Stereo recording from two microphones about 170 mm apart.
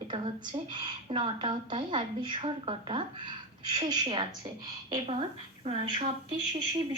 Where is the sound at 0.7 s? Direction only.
25° right (ahead or behind).